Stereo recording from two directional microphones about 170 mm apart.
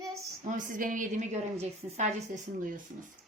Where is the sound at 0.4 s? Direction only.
50° right (ahead or behind).